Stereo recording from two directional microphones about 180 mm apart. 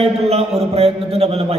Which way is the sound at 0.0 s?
35° right (ahead or behind).